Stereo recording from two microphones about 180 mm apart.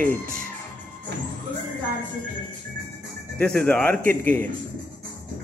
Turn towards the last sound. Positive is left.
turn(degrees=10)  # may be behind; listen again after turning